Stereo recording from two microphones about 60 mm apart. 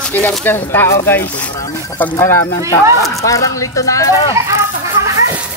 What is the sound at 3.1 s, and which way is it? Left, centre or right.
Speech, left.